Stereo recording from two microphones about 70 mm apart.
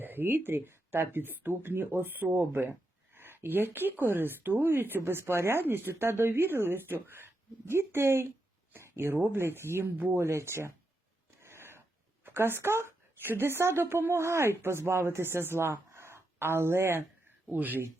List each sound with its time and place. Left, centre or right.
0.0 s speech: right
11.4 s a sound: right
12.2 s a woman's voice: right
17.5 s speech: right